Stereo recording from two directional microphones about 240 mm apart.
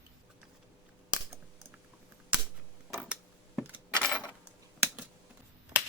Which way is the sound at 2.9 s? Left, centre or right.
Centre.